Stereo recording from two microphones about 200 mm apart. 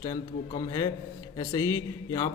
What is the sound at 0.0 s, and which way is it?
A man's voice, 20° left (ahead or behind).